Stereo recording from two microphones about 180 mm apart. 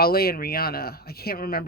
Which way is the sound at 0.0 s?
60° left (ahead or behind).